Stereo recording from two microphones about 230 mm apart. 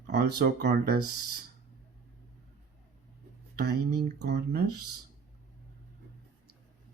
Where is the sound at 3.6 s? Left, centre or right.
Right.